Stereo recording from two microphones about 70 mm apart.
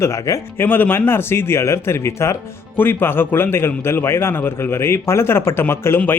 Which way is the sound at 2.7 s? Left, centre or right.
Left.